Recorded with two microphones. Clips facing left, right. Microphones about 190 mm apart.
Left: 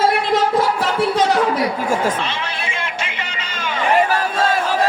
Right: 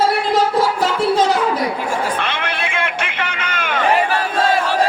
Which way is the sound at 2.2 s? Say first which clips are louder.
Right 2 dB; 60° right (ahead or behind).